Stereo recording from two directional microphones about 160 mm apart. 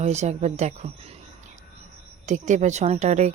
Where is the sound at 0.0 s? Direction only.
45° right (ahead or behind).